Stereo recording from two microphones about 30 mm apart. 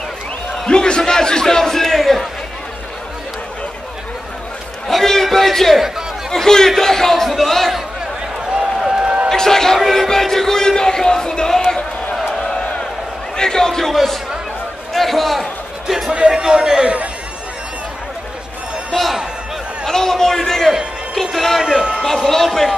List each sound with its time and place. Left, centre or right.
0.7 s a man's voice: left; by 2.2 s centre
4.8 s a sound: centre
5.3 s a man's voice: centre
9.0 s a sound: right
9.3 s speech: centre
13.4 s a man's voice: centre
16.1 s a man's voice: right
18.9 s a man's voice: centre